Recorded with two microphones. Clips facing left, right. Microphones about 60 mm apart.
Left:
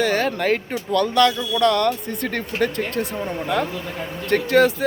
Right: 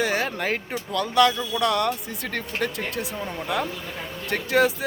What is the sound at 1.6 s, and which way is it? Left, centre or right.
Speech, centre.